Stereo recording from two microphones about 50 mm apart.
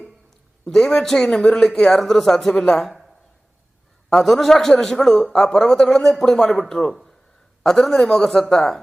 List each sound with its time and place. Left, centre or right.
0.6 s speech: centre
2.8 s a sound: centre
4.2 s a man's voice: centre